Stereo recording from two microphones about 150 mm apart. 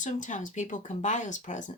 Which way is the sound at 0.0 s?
55° left (ahead or behind).